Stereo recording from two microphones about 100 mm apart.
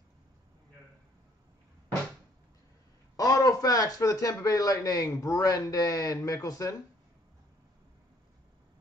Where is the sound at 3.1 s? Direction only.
35° left (ahead or behind).